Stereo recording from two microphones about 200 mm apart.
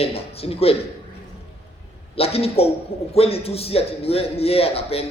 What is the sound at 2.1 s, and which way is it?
A man's voice, 30° left (ahead or behind).